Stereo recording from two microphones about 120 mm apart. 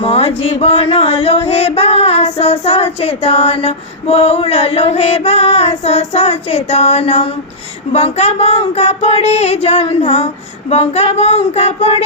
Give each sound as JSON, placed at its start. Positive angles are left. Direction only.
{"t": 0.0, "sound": "music", "side_deg": 55}